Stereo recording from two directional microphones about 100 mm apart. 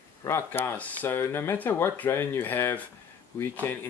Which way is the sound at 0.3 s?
20° left (ahead or behind).